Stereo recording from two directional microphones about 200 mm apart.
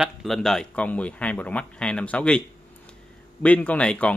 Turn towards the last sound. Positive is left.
turn(degrees=5)  # may be behind; listen again after turning